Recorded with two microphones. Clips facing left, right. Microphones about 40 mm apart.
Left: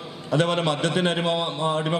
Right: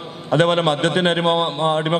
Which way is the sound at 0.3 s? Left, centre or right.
Right.